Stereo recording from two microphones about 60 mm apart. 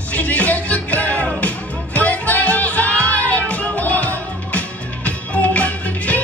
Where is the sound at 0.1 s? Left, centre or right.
Left.